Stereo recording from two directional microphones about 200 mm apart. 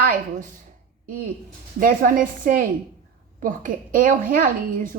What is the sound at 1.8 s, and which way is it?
A woman's voice, 45° right (ahead or behind).